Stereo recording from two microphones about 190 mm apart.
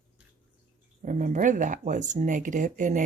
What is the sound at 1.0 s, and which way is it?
Speech, 40° right (ahead or behind).